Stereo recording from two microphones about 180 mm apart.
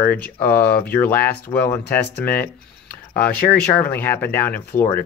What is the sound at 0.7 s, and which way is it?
Speech, 55° left (ahead or behind).